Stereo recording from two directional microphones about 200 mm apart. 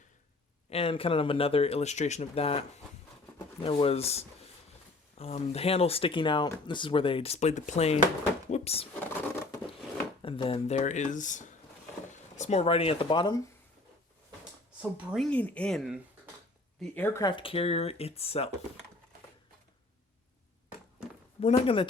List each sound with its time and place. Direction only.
0.7 s speech: 30° left (ahead or behind)
10.2 s speech: 25° left (ahead or behind)
14.8 s speech: 5° right (ahead or behind)
17.2 s speech: 25° left (ahead or behind)
21.4 s speech: 25° left (ahead or behind)